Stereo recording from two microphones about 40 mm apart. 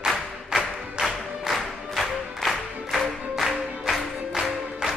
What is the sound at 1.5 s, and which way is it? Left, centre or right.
Music, centre.